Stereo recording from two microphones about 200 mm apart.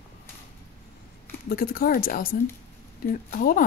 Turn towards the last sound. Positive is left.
turn(degrees=45)  # may be behind; listen again after turning